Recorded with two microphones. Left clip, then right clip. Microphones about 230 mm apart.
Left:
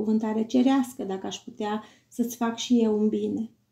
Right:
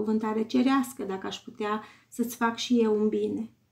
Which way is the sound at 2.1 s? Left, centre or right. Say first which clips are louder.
Left 2 dB; centre.